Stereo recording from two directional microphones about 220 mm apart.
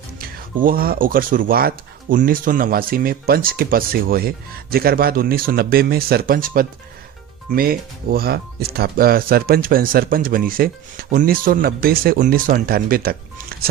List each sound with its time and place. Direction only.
0.2 s speech: 40° right (ahead or behind)